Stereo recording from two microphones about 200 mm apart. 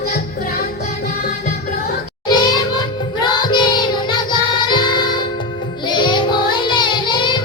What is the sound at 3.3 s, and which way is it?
Music, 20° left (ahead or behind).